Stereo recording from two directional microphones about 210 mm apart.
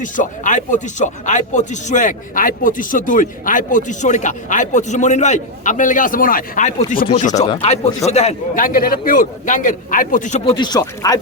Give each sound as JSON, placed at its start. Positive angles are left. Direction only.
{"t": 0.0, "sound": "speech", "side_deg": 35}
{"t": 7.4, "sound": "speech", "side_deg": 25}
{"t": 10.5, "sound": "speech", "side_deg": 20}